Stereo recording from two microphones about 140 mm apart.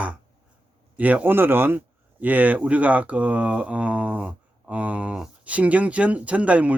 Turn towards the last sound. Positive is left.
turn(degrees=-10)  # may be behind; listen again after turning